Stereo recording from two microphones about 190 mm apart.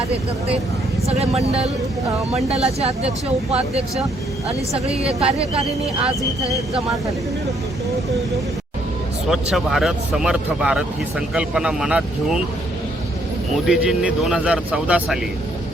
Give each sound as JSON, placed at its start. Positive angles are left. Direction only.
{"t": 1.0, "sound": "speech", "side_deg": -35}
{"t": 4.9, "sound": "speech", "side_deg": -30}
{"t": 9.3, "sound": "speech", "side_deg": 0}
{"t": 13.7, "sound": "speech", "side_deg": -5}